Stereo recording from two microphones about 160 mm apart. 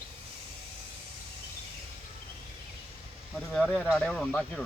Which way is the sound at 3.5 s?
5° left (ahead or behind).